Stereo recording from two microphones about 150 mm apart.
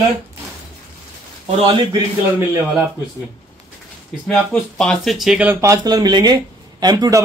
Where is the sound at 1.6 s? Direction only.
35° right (ahead or behind).